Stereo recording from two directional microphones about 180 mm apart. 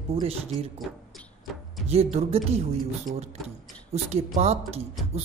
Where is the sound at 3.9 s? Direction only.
35° right (ahead or behind).